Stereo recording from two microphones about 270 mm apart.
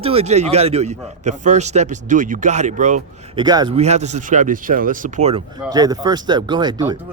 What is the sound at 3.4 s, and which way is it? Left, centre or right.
A man's voice, centre.